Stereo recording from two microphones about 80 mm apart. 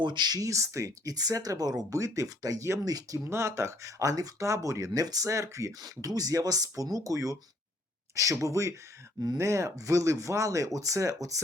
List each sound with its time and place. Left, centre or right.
0.0 s speech: right